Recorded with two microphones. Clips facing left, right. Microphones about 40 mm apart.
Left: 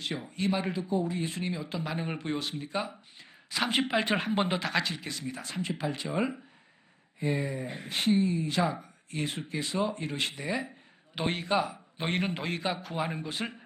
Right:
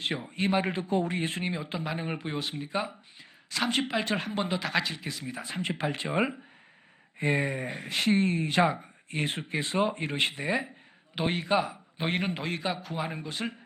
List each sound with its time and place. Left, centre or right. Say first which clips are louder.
0.0 s speech: right 2 dB; right
0.9 s speech: right 2 dB; right
1.1 s speech: right 2 dB; right
1.5 s speech: right 1 dB; right
1.8 s speech: right 1 dB; centre
3.5 s speech: even; centre
4.6 s a man's voice: right 1 dB; centre
5.8 s speech: right 3 dB; right
7.2 s speech: right 3 dB; right
7.9 s speech: right 1 dB; right
8.4 s speech: right 4 dB; right
11.1 s a man's voice: right 2 dB; centre